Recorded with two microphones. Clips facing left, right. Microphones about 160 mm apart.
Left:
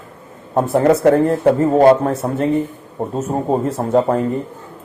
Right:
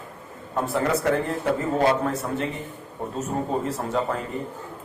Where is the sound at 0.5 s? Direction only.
50° left (ahead or behind).